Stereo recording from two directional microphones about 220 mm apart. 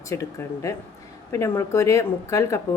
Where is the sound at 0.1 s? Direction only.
15° left (ahead or behind).